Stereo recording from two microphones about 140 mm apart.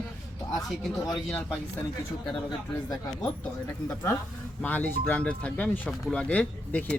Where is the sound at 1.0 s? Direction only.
25° left (ahead or behind).